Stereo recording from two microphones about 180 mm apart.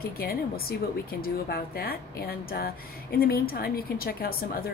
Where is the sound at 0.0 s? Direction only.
55° left (ahead or behind).